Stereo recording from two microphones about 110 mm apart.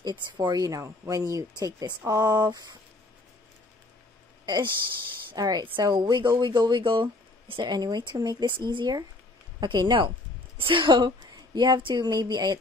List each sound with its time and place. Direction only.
0.0 s speech: 40° right (ahead or behind)
4.5 s speech: 45° right (ahead or behind)